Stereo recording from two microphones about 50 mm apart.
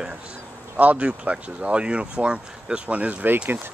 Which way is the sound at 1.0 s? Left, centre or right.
Right.